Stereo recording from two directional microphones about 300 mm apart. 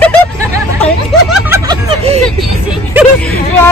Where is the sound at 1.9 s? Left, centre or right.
Right.